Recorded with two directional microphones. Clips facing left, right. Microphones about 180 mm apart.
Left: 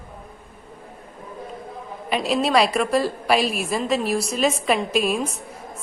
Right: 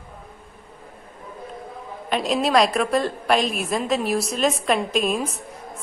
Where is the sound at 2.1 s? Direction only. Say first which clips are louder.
Even; centre (ahead or behind).